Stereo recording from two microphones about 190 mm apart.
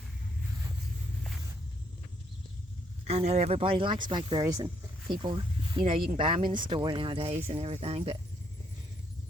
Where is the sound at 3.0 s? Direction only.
35° right (ahead or behind).